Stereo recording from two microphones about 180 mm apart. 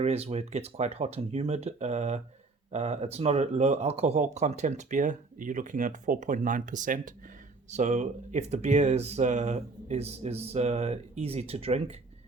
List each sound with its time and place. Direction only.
0.0 s speech: 35° right (ahead or behind)